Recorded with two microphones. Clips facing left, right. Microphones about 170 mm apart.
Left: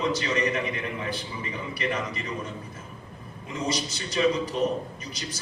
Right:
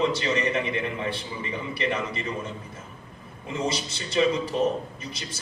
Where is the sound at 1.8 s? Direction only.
30° right (ahead or behind).